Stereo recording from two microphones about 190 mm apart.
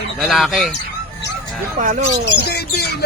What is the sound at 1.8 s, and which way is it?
Speech, 40° right (ahead or behind).